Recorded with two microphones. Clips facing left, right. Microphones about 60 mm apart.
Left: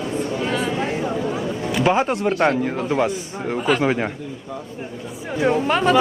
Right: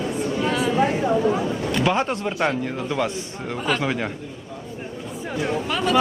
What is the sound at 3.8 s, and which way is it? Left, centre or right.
Speech, left.